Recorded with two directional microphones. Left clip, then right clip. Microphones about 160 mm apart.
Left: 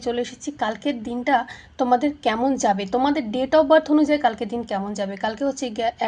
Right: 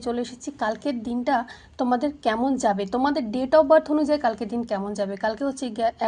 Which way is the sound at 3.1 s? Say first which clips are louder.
Right 2 dB; 25° right (ahead or behind).